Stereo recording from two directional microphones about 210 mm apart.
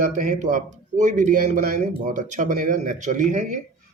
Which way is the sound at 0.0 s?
40° right (ahead or behind).